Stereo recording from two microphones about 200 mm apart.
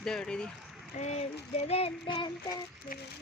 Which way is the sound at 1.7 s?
30° left (ahead or behind).